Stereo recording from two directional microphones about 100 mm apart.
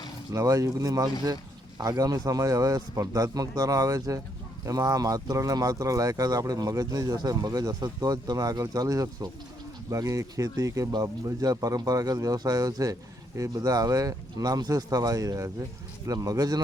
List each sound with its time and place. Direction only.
0.3 s speech: 35° right (ahead or behind)